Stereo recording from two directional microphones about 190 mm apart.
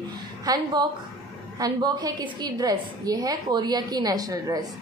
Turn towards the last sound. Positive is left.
turn(degrees=-20)  # may be behind; listen again after turning